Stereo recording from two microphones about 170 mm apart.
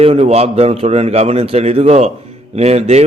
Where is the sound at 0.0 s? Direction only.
35° right (ahead or behind).